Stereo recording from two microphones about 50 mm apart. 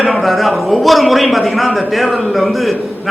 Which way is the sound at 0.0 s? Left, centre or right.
Centre.